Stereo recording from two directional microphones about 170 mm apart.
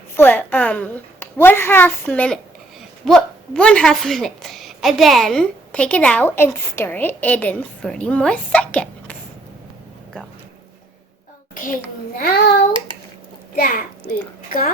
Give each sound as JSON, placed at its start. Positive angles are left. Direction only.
{"t": 0.2, "sound": "a woman's voice", "side_deg": 10}
{"t": 11.5, "sound": "a child's voice", "side_deg": 55}
{"t": 13.6, "sound": "a child's voice", "side_deg": 55}